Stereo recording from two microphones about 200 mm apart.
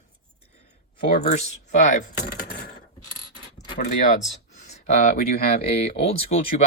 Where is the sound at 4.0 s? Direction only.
35° left (ahead or behind).